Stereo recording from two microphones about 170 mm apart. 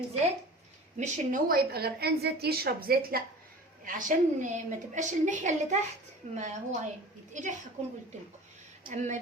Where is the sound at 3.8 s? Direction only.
50° right (ahead or behind).